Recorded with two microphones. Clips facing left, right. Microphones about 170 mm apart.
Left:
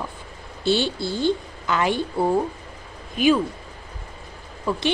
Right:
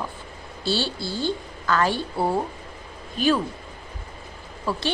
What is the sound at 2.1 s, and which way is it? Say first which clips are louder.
Speech: left 3 dB; 5° right (ahead or behind).